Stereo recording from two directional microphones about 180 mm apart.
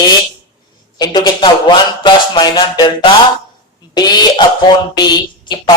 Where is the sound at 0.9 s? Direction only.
25° left (ahead or behind).